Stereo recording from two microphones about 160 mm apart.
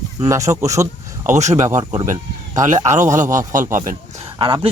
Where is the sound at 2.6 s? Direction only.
50° right (ahead or behind).